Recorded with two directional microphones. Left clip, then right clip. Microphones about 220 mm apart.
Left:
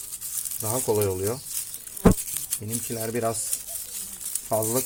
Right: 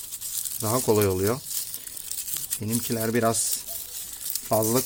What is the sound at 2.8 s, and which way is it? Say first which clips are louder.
Speech: right 3 dB; 35° right (ahead or behind).